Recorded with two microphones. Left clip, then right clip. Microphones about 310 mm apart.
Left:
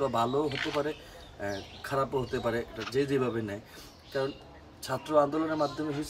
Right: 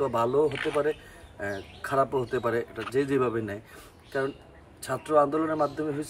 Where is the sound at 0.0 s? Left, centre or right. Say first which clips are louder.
Right 4 dB; centre.